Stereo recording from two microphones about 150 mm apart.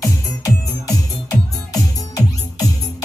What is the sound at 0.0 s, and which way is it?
Music, 25° left (ahead or behind).